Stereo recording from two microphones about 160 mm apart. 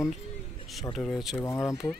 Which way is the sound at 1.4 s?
20° left (ahead or behind).